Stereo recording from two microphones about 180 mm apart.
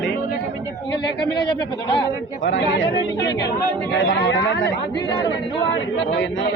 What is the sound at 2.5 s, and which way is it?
Speech, 75° left (ahead or behind).